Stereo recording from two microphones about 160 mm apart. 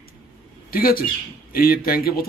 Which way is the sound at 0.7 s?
65° left (ahead or behind).